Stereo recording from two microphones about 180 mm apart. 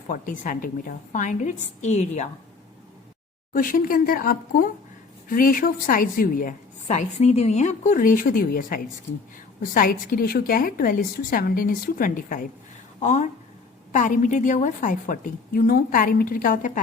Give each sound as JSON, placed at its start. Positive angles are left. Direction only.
{"t": 0.1, "sound": "a woman's voice", "side_deg": 50}
{"t": 3.5, "sound": "a woman's voice", "side_deg": 50}